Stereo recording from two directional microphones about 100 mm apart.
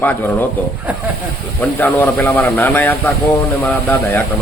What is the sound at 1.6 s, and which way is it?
A man's voice, 15° left (ahead or behind).